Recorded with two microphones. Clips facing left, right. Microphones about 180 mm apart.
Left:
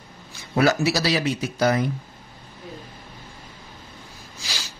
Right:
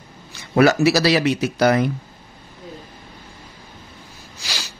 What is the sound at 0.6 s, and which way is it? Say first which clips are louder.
Speech: right 5 dB; 70° right (ahead or behind).